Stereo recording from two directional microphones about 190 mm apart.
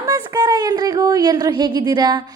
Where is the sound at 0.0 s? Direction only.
20° right (ahead or behind).